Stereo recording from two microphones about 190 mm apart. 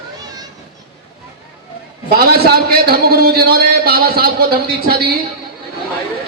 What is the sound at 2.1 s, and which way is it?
A man's voice, 55° right (ahead or behind).